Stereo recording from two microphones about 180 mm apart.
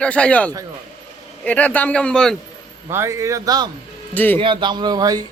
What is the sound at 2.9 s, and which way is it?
Speech, 15° right (ahead or behind).